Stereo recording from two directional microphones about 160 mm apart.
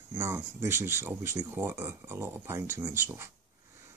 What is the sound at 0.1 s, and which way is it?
Speech, 10° right (ahead or behind).